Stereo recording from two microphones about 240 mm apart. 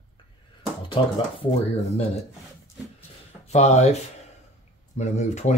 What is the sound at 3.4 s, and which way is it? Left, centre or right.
Speech, left.